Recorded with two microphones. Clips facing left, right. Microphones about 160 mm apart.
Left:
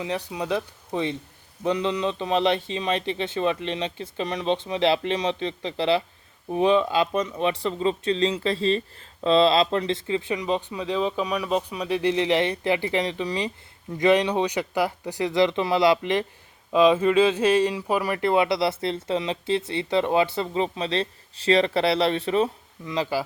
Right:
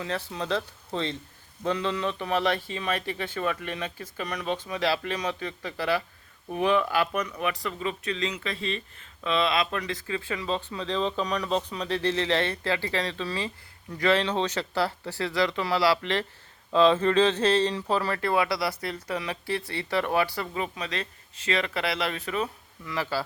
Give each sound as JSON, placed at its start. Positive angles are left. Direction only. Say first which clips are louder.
{"t": 0.0, "sound": "speech", "louder": "left 3 dB", "side_deg": 15}